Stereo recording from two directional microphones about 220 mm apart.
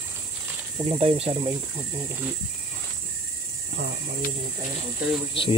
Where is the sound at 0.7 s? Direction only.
25° right (ahead or behind).